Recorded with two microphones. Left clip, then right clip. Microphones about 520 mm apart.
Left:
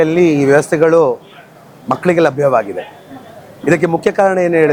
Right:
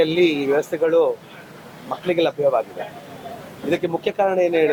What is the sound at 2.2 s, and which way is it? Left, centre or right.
Speech, left.